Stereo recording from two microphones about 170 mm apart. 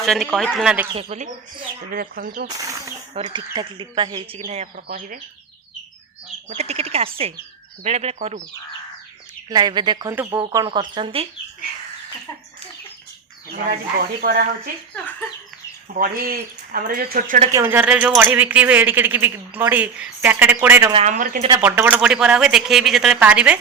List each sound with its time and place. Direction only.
0.0 s speech: centre (ahead or behind)
1.1 s speech: 40° right (ahead or behind)
1.9 s speech: 55° right (ahead or behind)
2.6 s speech: 20° right (ahead or behind); by 4.7 s 40° right (ahead or behind)
4.9 s a woman's voice: 55° right (ahead or behind)
6.5 s speech: 40° right (ahead or behind)
9.5 s speech: 25° right (ahead or behind)
13.5 s speech: 60° right (ahead or behind)
14.9 s a sound: 10° left (ahead or behind)
15.9 s speech: 55° right (ahead or behind)
17.5 s speech: 15° right (ahead or behind)
20.9 s a woman's voice: 45° right (ahead or behind)
21.6 s speech: 10° right (ahead or behind)